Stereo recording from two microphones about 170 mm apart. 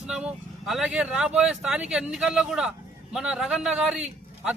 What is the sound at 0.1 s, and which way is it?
Speech, 5° right (ahead or behind).